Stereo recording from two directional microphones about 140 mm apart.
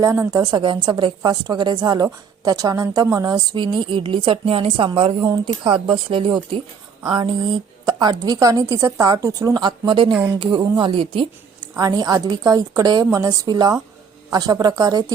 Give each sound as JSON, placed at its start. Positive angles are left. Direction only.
{"t": 0.0, "sound": "a woman's voice", "side_deg": -20}
{"t": 7.9, "sound": "a woman's voice", "side_deg": -30}
{"t": 11.8, "sound": "a woman's voice", "side_deg": -25}